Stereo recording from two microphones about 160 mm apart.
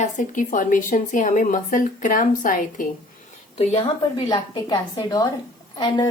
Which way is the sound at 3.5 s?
35° left (ahead or behind).